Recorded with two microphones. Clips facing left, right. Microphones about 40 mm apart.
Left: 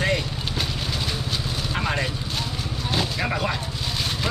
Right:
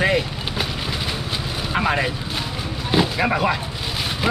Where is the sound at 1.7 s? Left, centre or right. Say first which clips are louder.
Right 6 dB; centre.